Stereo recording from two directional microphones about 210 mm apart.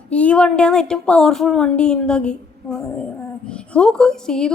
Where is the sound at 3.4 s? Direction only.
5° left (ahead or behind).